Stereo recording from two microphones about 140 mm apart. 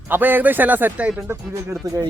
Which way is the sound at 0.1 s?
15° right (ahead or behind).